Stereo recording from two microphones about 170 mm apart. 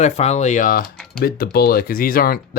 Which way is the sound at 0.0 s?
40° left (ahead or behind).